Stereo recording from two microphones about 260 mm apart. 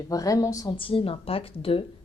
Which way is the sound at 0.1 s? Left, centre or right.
Centre.